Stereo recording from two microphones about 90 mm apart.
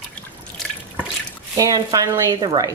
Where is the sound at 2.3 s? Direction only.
60° right (ahead or behind).